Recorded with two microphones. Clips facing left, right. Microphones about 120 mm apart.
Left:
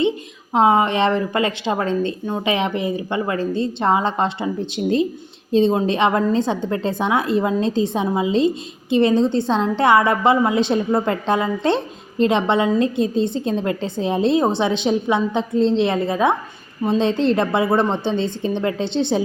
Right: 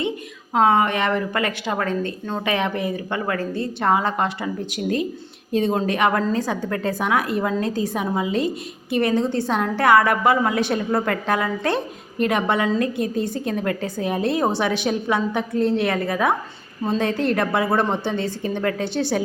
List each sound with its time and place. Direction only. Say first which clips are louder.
0.5 s a woman's voice: left 2 dB; 20° left (ahead or behind)